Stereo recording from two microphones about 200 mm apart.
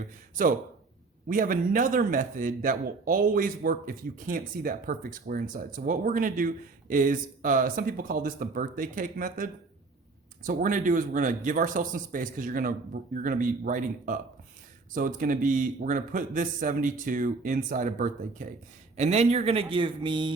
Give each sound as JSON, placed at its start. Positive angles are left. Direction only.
{"t": 0.0, "sound": "speech", "side_deg": -45}